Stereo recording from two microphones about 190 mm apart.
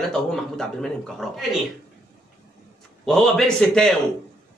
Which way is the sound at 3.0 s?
Centre (ahead or behind).